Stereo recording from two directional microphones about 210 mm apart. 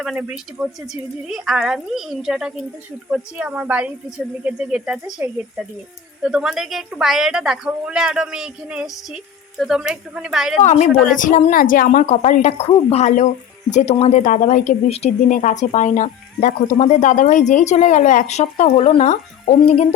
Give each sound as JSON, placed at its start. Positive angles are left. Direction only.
{"t": 0.0, "sound": "a woman's voice", "side_deg": -5}
{"t": 10.6, "sound": "a woman's voice", "side_deg": 35}